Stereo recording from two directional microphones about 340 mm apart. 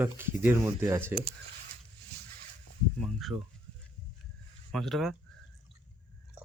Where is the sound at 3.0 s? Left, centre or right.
Centre.